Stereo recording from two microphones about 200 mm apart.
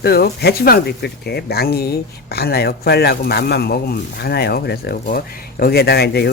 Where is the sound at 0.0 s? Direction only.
50° left (ahead or behind).